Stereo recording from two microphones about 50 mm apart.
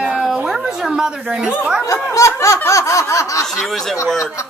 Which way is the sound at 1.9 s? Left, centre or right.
Left.